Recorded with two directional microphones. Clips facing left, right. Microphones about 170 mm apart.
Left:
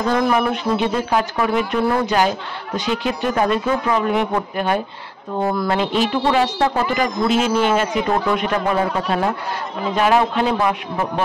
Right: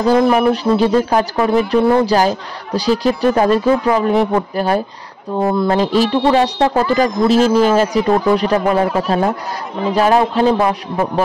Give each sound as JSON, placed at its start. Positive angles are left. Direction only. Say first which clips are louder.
{"t": 0.0, "sound": "speech", "louder": "right 6 dB", "side_deg": -35}
{"t": 9.9, "sound": "speech", "louder": "right 3 dB", "side_deg": -35}